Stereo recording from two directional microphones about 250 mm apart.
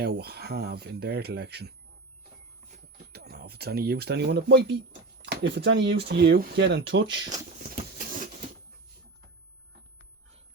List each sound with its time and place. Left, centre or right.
0.0 s speech: right
3.1 s speech: right
7.9 s a sound: right